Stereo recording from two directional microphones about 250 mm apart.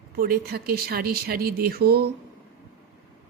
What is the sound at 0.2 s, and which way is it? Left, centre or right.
Speech, right.